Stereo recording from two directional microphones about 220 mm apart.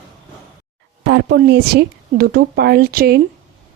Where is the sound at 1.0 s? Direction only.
50° right (ahead or behind).